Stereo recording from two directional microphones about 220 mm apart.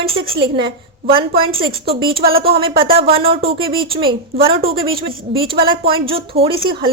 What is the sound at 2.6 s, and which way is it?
A woman's voice, 25° right (ahead or behind).